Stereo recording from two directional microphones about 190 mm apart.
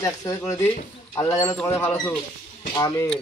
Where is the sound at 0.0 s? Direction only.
15° left (ahead or behind).